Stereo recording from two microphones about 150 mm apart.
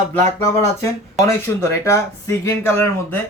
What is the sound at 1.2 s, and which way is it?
Speech, 20° left (ahead or behind).